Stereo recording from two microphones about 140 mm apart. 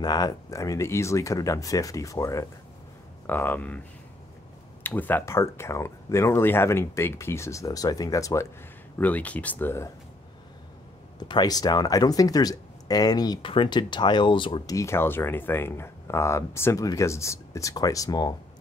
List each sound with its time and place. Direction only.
0.0 s speech: 30° left (ahead or behind)
3.3 s speech: 15° left (ahead or behind)
4.8 s speech: 15° left (ahead or behind)
8.9 s speech: 10° left (ahead or behind)
11.1 s speech: 30° left (ahead or behind)
14.8 s speech: 20° left (ahead or behind)